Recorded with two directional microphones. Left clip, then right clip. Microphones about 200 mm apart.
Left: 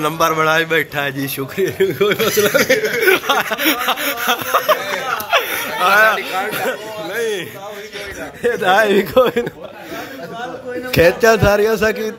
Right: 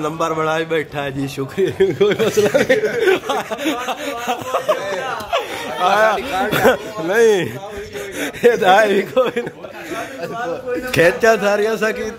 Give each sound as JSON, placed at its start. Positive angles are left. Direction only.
{"t": 0.0, "sound": "a man's voice", "side_deg": 0}
{"t": 2.7, "sound": "speech", "side_deg": -50}
{"t": 3.0, "sound": "a man's voice", "side_deg": -5}
{"t": 5.3, "sound": "chuckle", "side_deg": -15}
{"t": 6.5, "sound": "speech", "side_deg": -55}
{"t": 8.4, "sound": "speech", "side_deg": -15}
{"t": 8.8, "sound": "speech", "side_deg": 15}
{"t": 10.9, "sound": "speech", "side_deg": 10}